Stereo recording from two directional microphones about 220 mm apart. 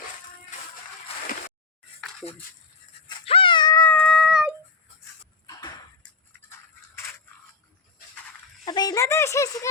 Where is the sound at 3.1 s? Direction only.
25° left (ahead or behind); by 4.5 s centre (ahead or behind).